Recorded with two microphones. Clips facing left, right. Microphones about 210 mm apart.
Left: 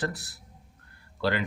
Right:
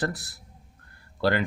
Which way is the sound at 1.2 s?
45° right (ahead or behind).